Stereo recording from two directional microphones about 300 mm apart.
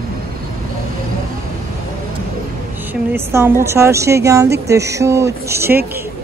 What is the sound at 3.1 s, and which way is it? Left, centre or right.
Speech, centre.